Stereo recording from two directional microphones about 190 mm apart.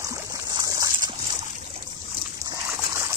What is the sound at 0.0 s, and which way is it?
Boat, 15° right (ahead or behind).